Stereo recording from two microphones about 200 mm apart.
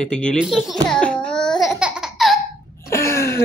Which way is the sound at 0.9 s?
5° left (ahead or behind).